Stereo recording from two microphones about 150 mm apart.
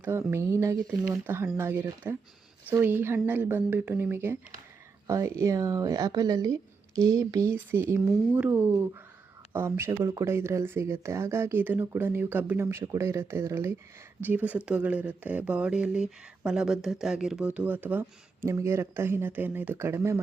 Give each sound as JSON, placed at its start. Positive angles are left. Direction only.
{"t": 0.0, "sound": "speech", "side_deg": -15}